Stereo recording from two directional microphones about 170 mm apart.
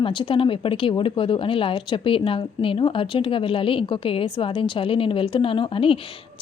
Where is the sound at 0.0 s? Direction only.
30° left (ahead or behind).